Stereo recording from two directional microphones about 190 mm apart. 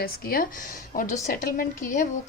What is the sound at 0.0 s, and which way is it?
A woman's voice, 50° left (ahead or behind).